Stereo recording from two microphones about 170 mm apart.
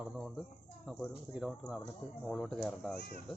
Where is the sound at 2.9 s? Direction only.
65° left (ahead or behind).